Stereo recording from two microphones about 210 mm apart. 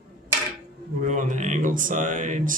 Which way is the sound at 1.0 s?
35° right (ahead or behind).